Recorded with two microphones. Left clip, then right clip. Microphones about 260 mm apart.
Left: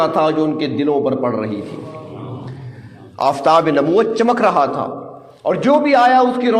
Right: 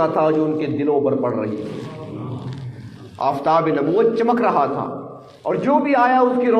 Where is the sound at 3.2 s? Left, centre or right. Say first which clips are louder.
Left 4 dB; left.